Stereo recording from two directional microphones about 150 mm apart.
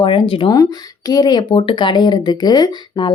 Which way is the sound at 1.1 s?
25° left (ahead or behind).